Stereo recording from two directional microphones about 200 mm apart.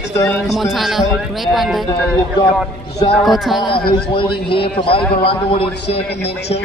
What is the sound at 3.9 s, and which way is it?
A man's voice, 25° left (ahead or behind).